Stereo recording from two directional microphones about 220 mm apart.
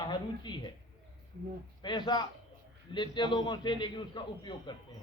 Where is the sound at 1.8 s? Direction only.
20° left (ahead or behind).